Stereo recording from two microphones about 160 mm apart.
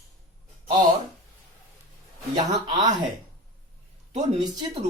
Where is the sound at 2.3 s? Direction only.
25° right (ahead or behind).